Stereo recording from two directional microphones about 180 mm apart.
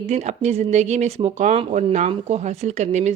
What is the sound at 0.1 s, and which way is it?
Speech, 40° right (ahead or behind).